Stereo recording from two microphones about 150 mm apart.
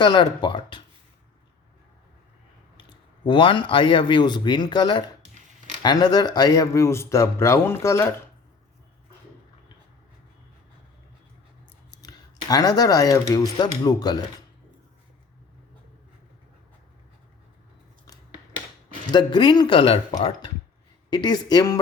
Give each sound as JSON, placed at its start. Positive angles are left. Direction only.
{"t": 0.0, "sound": "speech", "side_deg": 30}
{"t": 3.2, "sound": "speech", "side_deg": 35}
{"t": 11.9, "sound": "speech", "side_deg": 25}
{"t": 19.1, "sound": "speech", "side_deg": 30}